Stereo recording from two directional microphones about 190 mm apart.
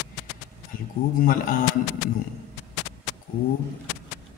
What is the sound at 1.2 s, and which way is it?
Speech, 50° left (ahead or behind).